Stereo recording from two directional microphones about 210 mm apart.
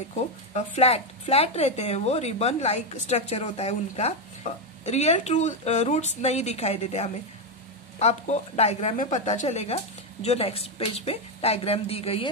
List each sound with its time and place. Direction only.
0.1 s speech: 30° left (ahead or behind)